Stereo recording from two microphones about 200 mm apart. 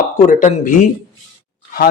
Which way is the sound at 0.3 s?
40° left (ahead or behind).